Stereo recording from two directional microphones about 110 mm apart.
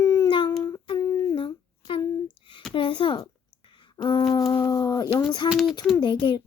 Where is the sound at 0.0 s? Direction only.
35° left (ahead or behind).